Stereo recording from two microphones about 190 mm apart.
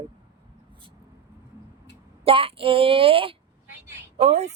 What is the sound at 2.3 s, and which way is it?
A woman's voice, 30° right (ahead or behind).